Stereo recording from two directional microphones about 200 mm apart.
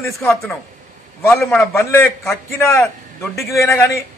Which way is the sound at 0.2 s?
15° left (ahead or behind).